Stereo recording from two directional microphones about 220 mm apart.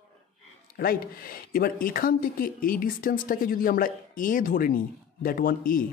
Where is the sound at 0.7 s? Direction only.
40° left (ahead or behind).